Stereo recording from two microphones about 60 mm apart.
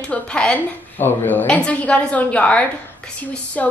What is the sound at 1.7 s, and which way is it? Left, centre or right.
A woman's voice, left.